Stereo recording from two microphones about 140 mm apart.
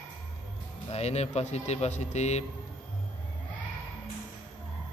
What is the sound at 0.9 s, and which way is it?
Speech, 50° left (ahead or behind).